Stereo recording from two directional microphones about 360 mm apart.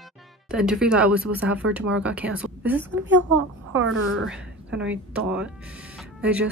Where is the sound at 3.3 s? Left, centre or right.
Right.